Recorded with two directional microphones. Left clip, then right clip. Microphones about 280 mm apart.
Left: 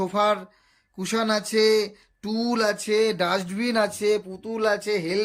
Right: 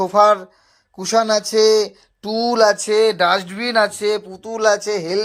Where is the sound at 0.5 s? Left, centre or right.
Centre.